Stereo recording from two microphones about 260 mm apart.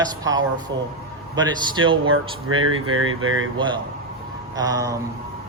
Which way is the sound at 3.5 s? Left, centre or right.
Centre.